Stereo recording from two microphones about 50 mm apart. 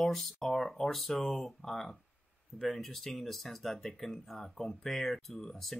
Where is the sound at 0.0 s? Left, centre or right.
Centre.